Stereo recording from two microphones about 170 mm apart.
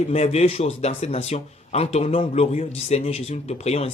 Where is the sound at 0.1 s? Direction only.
40° left (ahead or behind).